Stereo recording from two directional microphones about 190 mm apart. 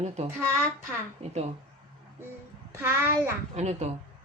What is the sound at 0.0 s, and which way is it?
Speech, 35° right (ahead or behind).